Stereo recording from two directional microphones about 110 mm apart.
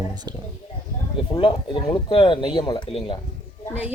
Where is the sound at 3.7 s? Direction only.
15° right (ahead or behind).